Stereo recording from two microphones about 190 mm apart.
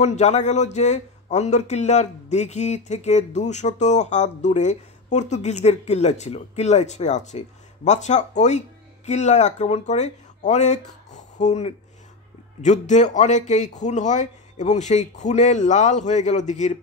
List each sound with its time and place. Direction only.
0.0 s speech: 35° left (ahead or behind)